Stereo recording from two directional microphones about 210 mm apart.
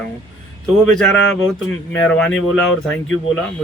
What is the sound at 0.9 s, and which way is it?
Speech, 5° left (ahead or behind).